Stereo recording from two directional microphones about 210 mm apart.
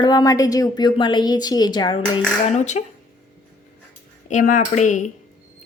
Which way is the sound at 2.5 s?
35° left (ahead or behind).